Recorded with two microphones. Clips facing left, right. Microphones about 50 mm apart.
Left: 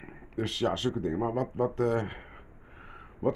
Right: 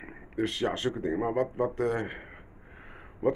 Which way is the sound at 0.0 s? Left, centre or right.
Centre.